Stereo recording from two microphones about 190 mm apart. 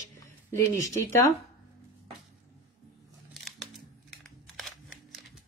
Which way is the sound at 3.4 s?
Centre (ahead or behind).